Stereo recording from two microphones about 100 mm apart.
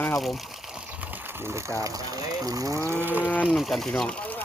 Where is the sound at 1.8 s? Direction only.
35° right (ahead or behind).